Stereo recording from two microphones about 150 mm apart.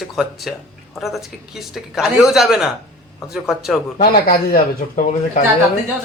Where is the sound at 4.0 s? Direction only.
90° left; by 5.4 s 65° left (ahead or behind).